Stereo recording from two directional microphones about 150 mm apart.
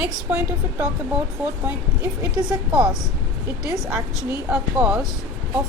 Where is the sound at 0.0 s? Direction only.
10° right (ahead or behind).